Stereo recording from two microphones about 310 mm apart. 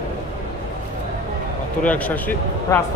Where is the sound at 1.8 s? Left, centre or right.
Centre.